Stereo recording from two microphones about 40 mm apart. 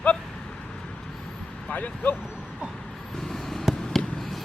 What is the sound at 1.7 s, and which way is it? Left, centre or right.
Speech, left.